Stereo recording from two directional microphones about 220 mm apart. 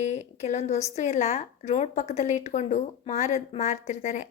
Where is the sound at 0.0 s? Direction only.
30° left (ahead or behind).